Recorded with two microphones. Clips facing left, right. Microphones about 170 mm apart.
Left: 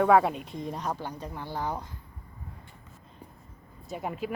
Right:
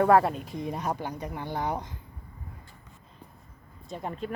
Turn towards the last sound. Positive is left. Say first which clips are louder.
# left 1 dB
turn(degrees=10)  # may be behind; listen again after turning